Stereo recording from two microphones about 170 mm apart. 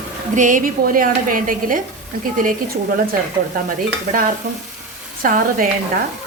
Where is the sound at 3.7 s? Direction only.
55° right (ahead or behind).